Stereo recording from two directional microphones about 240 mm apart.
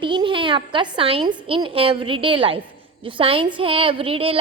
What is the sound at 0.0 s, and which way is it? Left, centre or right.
A woman's voice, centre.